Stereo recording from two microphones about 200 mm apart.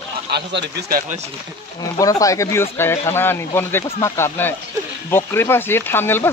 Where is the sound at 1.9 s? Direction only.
15° left (ahead or behind).